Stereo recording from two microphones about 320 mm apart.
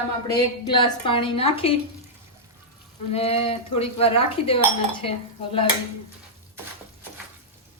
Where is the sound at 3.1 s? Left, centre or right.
Centre.